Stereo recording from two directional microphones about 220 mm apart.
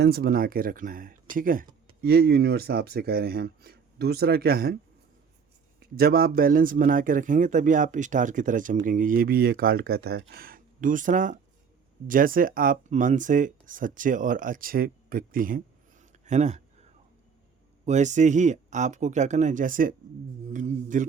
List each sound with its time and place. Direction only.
0.0 s a man's voice: 45° right (ahead or behind)
5.8 s a man's voice: 45° right (ahead or behind)
17.8 s a man's voice: 30° right (ahead or behind)